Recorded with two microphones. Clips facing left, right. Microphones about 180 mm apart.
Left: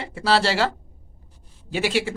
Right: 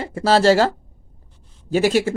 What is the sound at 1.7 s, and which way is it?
Speech, 45° right (ahead or behind).